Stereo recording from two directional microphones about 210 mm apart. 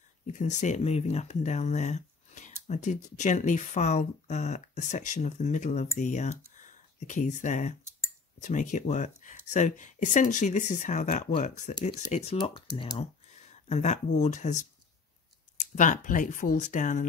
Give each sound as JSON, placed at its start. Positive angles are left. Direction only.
{"t": 0.3, "sound": "speech", "side_deg": 35}
{"t": 15.7, "sound": "speech", "side_deg": 35}